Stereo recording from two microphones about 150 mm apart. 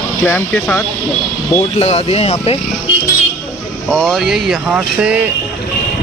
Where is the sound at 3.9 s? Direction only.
Centre (ahead or behind).